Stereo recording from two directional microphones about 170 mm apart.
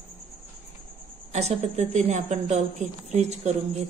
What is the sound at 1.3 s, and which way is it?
A woman's voice, 40° right (ahead or behind).